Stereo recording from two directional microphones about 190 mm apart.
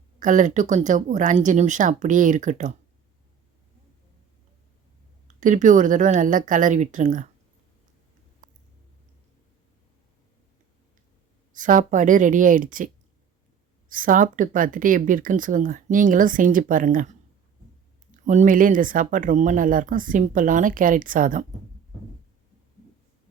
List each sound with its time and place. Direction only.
0.2 s speech: 40° right (ahead or behind)
5.4 s speech: 40° right (ahead or behind)
11.5 s speech: 45° right (ahead or behind)
18.3 s speech: 40° right (ahead or behind)